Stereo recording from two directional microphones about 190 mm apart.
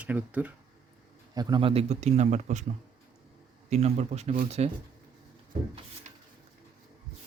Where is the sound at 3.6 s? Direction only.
35° right (ahead or behind).